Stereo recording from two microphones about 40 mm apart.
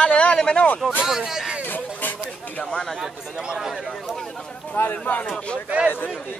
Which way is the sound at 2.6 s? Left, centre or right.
Centre.